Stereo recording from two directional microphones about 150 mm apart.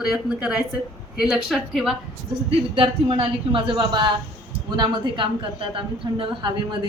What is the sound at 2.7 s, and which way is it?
A woman's voice, 35° right (ahead or behind).